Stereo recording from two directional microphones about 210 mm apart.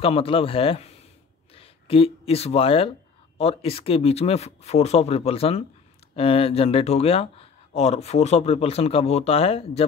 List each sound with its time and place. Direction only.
0.0 s speech: 25° left (ahead or behind)